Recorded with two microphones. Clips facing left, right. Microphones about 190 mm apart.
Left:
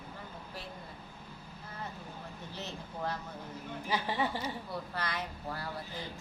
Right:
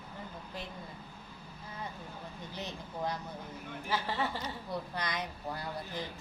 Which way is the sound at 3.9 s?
15° left (ahead or behind).